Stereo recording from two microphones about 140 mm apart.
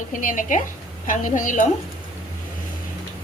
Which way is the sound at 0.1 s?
70° left (ahead or behind).